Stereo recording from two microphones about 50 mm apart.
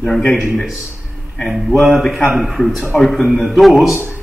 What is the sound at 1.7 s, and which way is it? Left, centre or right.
A man's voice, centre.